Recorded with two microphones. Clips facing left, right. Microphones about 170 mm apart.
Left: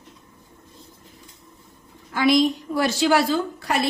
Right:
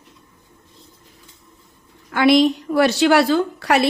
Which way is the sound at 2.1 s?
65° right (ahead or behind).